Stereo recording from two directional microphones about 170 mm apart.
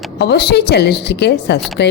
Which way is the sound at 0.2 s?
75° left (ahead or behind).